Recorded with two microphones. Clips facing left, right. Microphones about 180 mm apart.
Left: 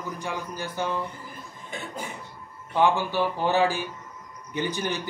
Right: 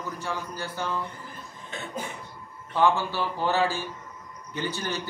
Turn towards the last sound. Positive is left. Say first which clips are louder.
# left 3 dB
turn(degrees=15)  # may be behind; listen again after turning